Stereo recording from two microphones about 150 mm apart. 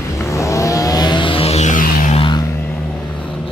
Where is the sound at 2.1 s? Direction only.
35° left (ahead or behind).